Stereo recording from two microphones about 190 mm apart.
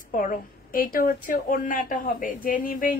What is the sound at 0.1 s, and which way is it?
A woman's voice, 45° left (ahead or behind).